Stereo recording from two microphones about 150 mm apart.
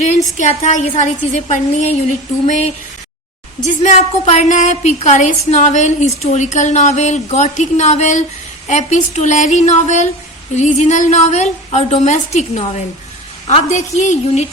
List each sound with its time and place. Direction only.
0.3 s a woman's voice: 50° left (ahead or behind)